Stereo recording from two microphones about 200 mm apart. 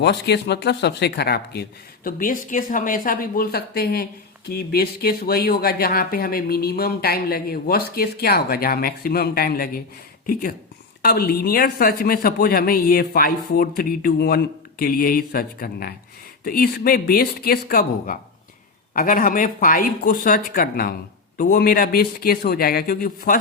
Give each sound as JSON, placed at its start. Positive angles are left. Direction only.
{"t": 0.0, "sound": "speech", "side_deg": 55}
{"t": 2.0, "sound": "speech", "side_deg": 45}
{"t": 11.0, "sound": "speech", "side_deg": 50}